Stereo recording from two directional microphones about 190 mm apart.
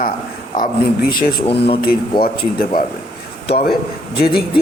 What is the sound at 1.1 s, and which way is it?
A man's voice, 50° left (ahead or behind).